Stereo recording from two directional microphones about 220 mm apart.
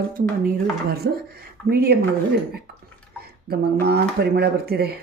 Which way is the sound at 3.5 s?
45° right (ahead or behind).